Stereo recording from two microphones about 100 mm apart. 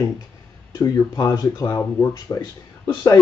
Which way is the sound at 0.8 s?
35° left (ahead or behind).